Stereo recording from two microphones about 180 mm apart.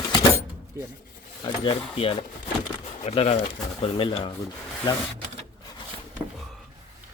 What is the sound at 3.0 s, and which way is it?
Speech, 35° left (ahead or behind).